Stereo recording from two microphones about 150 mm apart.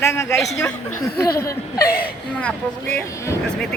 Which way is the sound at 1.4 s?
20° left (ahead or behind).